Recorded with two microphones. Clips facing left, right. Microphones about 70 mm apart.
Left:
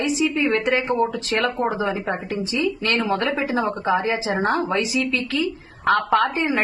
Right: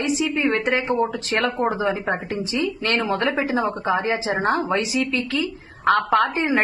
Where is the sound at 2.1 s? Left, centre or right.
Right.